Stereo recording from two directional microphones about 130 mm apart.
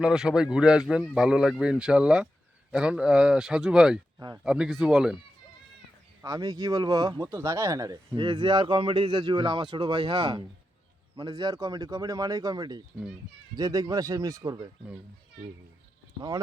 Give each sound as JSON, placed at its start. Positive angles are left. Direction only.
{"t": 0.0, "sound": "speech", "side_deg": -5}
{"t": 6.2, "sound": "speech", "side_deg": -25}